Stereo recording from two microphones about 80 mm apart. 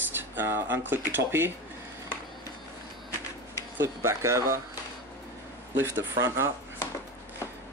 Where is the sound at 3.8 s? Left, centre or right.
Right.